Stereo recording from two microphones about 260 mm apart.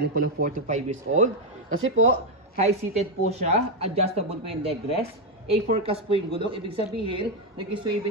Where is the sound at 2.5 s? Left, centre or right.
Right.